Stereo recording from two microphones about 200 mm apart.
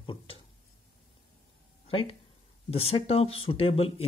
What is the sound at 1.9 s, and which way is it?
Speech, 25° left (ahead or behind).